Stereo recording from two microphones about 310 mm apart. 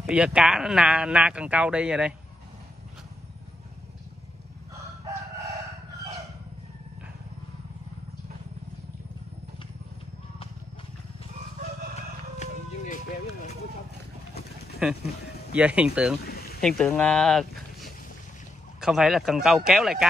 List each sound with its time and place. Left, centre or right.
0.1 s speech: centre
5.0 s chicken: centre
11.9 s wild animals: left
14.8 s speech: centre
16.3 s a sound: left
16.6 s speech: centre